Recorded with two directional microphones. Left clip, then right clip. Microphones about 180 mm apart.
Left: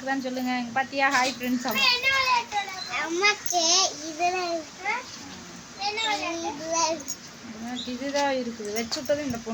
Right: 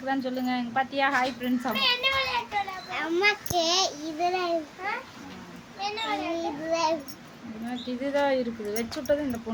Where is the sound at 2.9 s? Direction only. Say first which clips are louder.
Left 1 dB; 20° right (ahead or behind).